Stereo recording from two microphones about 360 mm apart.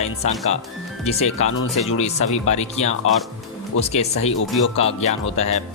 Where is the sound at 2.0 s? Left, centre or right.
Centre.